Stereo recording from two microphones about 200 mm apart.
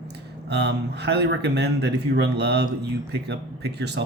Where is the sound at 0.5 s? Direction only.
55° right (ahead or behind).